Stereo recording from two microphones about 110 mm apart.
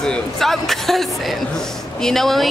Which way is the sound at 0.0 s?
5° left (ahead or behind).